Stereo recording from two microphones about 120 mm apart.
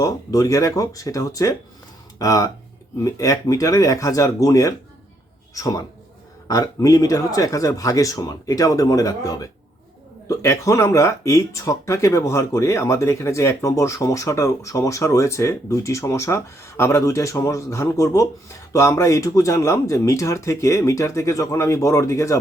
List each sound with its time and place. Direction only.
0.0 s speech: 30° left (ahead or behind)